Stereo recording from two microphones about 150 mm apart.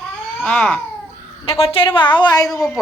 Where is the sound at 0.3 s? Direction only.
10° left (ahead or behind).